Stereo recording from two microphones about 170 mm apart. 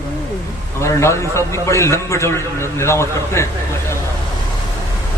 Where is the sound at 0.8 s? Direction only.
15° left (ahead or behind).